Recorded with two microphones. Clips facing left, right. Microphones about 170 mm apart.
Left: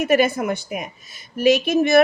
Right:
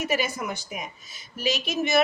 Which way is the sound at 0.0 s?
55° left (ahead or behind).